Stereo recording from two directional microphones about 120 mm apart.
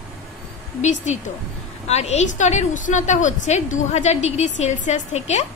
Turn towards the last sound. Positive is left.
turn(degrees=70)  # may be behind; listen again after turning